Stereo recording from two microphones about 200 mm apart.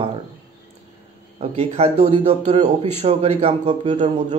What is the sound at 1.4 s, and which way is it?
A man's voice, 30° right (ahead or behind).